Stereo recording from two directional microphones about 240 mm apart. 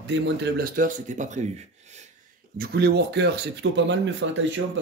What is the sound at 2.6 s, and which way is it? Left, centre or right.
Speech, right.